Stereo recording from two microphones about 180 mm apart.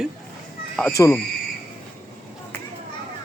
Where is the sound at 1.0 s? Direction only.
15° left (ahead or behind).